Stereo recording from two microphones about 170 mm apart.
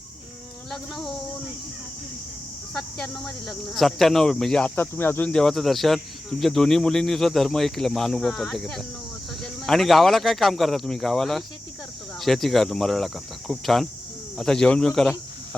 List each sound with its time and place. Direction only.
0.7 s speech: centre (ahead or behind)
2.7 s speech: 5° left (ahead or behind)